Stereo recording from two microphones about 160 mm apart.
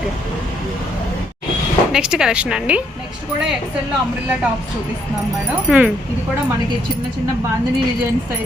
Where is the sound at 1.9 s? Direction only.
5° right (ahead or behind).